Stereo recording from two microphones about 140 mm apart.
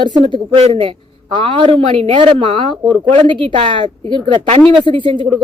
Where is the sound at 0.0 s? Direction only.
35° right (ahead or behind).